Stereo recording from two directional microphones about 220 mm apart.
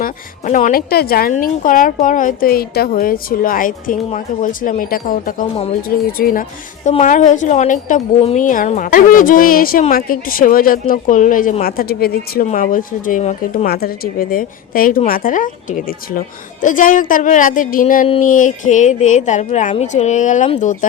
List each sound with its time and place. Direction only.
0.0 s a woman's voice: 35° left (ahead or behind)